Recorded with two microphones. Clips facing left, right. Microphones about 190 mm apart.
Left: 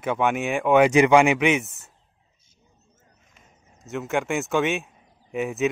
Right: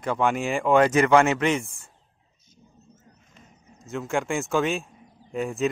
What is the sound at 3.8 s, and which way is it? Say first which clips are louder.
Speech: left 1 dB; centre (ahead or behind).